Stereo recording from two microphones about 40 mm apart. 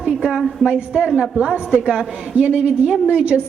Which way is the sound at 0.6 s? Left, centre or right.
Centre.